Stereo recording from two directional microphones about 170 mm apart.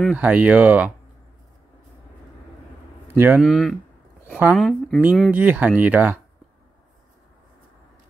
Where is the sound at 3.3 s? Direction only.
Centre (ahead or behind).